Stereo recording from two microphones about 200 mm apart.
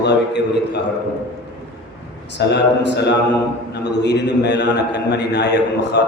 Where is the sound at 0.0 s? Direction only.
60° left (ahead or behind).